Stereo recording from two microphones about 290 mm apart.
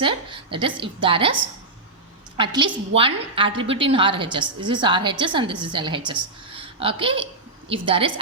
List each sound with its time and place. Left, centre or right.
0.0 s a woman's voice: centre
2.4 s a woman's voice: centre